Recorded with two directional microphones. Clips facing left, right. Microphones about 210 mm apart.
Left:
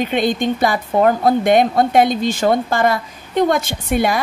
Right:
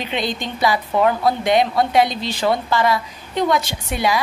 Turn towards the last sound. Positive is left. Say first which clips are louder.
# left 3 dB
turn(degrees=50)  # may be behind; listen again after turning